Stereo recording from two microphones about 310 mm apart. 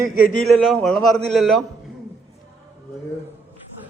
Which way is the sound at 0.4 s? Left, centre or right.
Centre.